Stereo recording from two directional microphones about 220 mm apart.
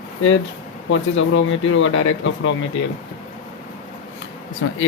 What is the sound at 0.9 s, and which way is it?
Speech, 60° left (ahead or behind).